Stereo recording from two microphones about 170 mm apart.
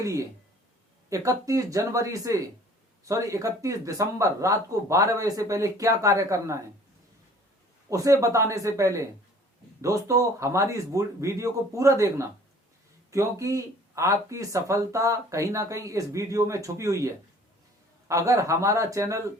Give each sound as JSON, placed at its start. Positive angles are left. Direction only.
{"t": 0.0, "sound": "speech", "side_deg": -20}
{"t": 7.9, "sound": "a man's voice", "side_deg": -20}